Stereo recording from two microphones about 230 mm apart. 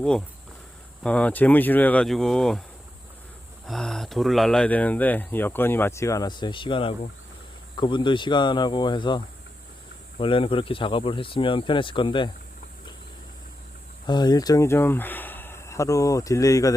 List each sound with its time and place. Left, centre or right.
0.0 s speech: centre
3.7 s speech: centre; by 12.3 s left
14.1 s speech: centre